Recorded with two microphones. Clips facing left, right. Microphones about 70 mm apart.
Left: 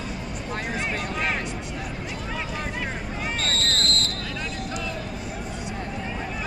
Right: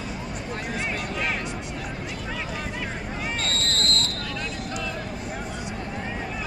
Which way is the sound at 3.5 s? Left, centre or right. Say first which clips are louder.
Left 1 dB; left.